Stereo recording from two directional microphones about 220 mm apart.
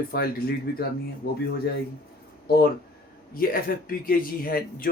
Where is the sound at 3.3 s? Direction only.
40° left (ahead or behind).